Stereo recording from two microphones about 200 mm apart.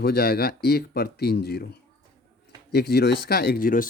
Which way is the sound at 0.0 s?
50° left (ahead or behind).